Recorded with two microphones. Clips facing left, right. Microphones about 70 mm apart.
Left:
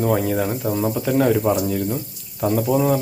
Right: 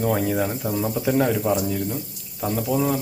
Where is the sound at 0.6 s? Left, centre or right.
Centre.